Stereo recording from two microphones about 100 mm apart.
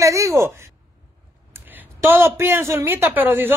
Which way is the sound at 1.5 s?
20° right (ahead or behind).